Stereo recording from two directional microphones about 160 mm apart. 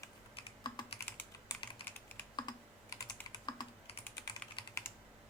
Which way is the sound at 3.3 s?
30° left (ahead or behind).